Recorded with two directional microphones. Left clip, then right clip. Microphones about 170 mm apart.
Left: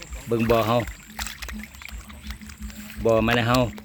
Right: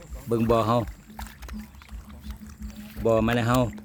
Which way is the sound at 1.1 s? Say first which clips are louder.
Left 9 dB; 25° left (ahead or behind).